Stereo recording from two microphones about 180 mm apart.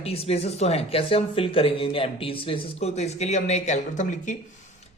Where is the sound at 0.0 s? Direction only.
35° left (ahead or behind).